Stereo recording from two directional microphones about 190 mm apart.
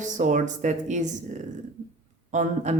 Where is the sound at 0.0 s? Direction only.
40° right (ahead or behind).